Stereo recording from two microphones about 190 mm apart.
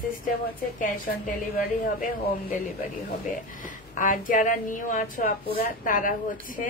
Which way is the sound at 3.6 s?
45° left (ahead or behind).